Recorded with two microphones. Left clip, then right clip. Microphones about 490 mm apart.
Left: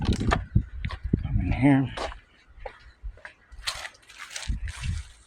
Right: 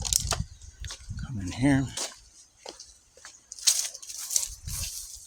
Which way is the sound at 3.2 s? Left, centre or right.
Right.